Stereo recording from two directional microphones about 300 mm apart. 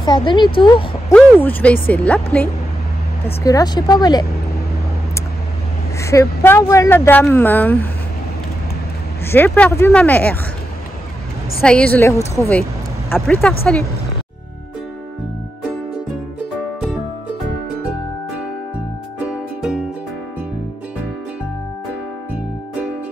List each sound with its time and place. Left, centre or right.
0.0 s a woman's voice: centre
1.1 s speech: centre
5.9 s speech: centre
9.2 s speech: centre
11.6 s speech: centre
19.1 s music: centre